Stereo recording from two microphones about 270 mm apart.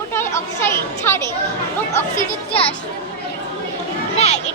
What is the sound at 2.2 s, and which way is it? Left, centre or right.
Speech, left.